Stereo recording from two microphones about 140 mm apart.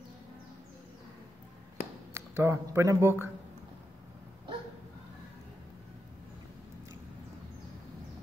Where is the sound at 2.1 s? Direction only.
20° right (ahead or behind).